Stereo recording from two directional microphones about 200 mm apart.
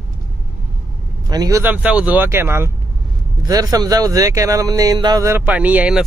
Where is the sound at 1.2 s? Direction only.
20° right (ahead or behind).